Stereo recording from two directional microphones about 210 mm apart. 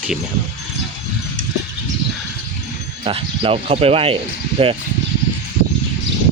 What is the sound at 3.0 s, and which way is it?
Speech, 25° right (ahead or behind).